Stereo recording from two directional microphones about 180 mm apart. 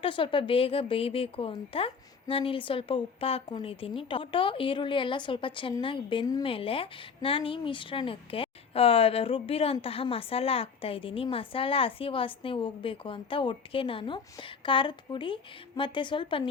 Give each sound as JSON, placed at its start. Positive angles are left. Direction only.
{"t": 0.0, "sound": "speech", "side_deg": 30}